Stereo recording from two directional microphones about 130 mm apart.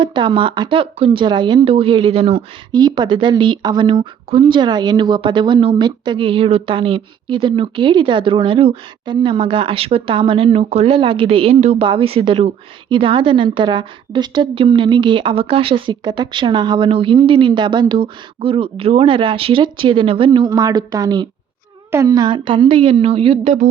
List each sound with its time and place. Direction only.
0.0 s speech: 40° right (ahead or behind)
2.7 s speech: 35° right (ahead or behind)
20.5 s a woman's voice: 30° right (ahead or behind); by 23.6 s 45° right (ahead or behind)